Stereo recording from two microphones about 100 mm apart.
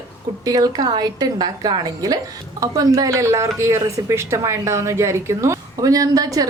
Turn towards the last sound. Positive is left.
turn(degrees=-35)  # may be behind; listen again after turning